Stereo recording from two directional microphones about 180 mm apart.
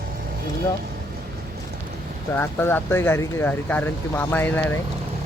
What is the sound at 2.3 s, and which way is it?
Speech, 15° left (ahead or behind).